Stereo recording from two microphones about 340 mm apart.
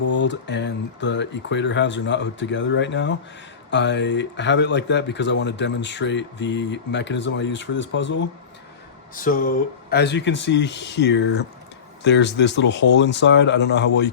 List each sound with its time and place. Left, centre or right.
0.1 s speech: left